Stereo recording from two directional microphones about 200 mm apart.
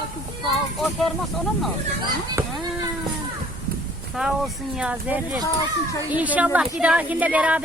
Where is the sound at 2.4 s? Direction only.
15° right (ahead or behind).